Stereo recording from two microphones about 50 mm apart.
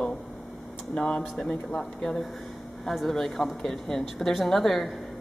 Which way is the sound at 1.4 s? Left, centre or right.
Centre.